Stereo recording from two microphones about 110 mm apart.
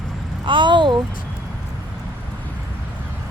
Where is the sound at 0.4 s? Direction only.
45° right (ahead or behind).